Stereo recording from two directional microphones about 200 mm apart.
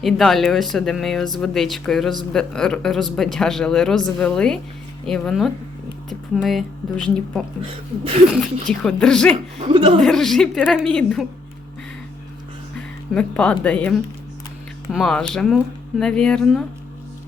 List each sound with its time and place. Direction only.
0.0 s speech: centre (ahead or behind)
8.6 s speech: 5° left (ahead or behind)
9.3 s speech: 25° right (ahead or behind)
10.0 s speech: centre (ahead or behind)
12.7 s speech: 5° left (ahead or behind)
14.9 s speech: centre (ahead or behind)